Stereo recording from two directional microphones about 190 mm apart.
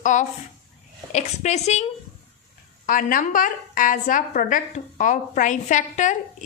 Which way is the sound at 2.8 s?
45° left (ahead or behind).